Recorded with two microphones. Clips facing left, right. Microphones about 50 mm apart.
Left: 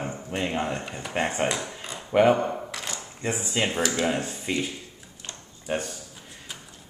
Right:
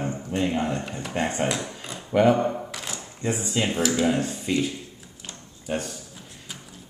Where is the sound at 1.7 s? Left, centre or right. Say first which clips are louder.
Even; centre.